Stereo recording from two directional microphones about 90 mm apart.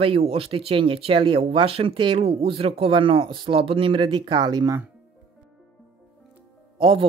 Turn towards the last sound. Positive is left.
turn(degrees=-80)